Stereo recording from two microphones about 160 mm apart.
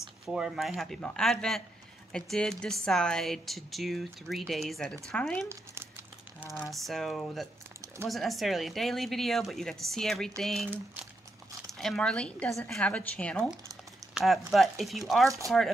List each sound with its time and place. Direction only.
0.2 s speech: 5° right (ahead or behind)
5.5 s a sound: 15° right (ahead or behind)
6.4 s a woman's voice: 15° left (ahead or behind)
6.7 s speech: centre (ahead or behind)
11.8 s a woman's voice: 5° left (ahead or behind)
15.2 s speech: 20° right (ahead or behind)